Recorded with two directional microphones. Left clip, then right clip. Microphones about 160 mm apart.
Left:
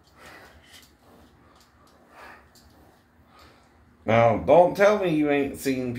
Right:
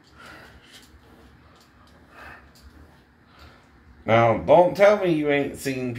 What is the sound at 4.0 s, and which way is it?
Speech, 25° left (ahead or behind).